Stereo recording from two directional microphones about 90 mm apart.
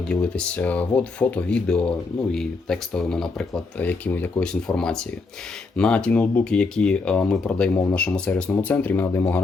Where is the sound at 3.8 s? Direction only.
20° left (ahead or behind).